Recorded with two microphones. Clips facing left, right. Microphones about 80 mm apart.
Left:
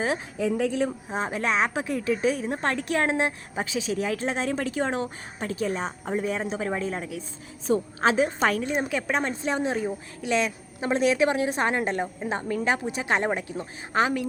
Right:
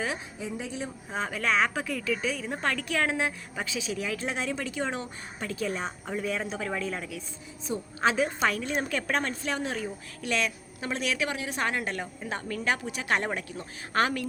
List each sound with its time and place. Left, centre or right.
0.3 s speech: left
1.1 s speech: left
6.2 s a woman's voice: left
8.6 s a woman's voice: centre